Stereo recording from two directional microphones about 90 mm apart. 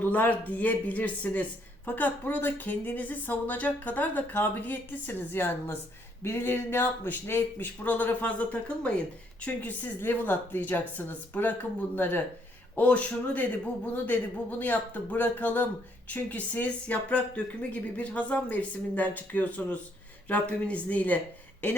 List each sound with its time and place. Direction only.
0.0 s speech: 20° left (ahead or behind)